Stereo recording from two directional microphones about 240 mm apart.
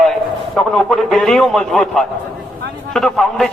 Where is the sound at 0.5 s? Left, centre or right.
Centre.